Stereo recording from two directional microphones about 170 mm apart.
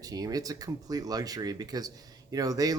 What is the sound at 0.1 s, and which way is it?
Speech, 20° right (ahead or behind).